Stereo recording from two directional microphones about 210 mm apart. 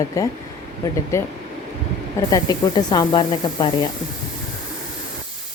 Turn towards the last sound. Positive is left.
turn(degrees=20)  # may be behind; listen again after turning